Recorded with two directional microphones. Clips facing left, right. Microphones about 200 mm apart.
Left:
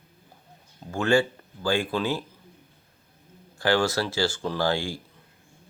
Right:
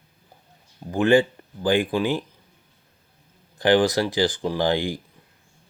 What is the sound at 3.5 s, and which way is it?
Speech, 20° right (ahead or behind).